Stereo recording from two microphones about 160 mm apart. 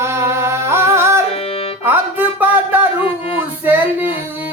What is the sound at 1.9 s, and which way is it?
Music, 10° right (ahead or behind).